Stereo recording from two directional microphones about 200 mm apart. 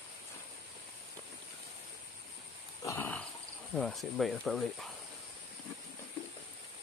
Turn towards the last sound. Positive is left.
turn(degrees=0)  # may be behind; listen again after turning